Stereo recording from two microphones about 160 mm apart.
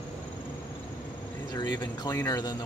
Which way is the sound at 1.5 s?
25° left (ahead or behind).